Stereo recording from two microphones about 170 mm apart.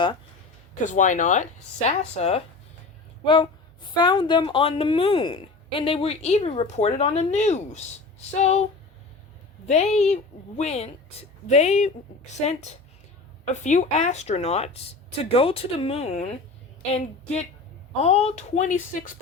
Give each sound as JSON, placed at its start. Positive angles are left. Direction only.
{"t": 0.8, "sound": "speech", "side_deg": 50}
{"t": 9.6, "sound": "speech", "side_deg": 40}
{"t": 18.0, "sound": "speech", "side_deg": 40}